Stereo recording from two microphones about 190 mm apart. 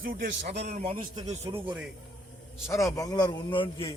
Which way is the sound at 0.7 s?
45° right (ahead or behind).